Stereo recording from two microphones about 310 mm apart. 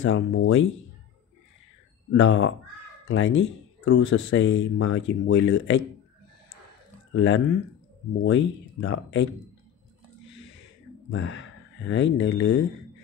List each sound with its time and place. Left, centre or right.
0.0 s speech: left
2.1 s speech: left
7.2 s speech: left
11.1 s speech: left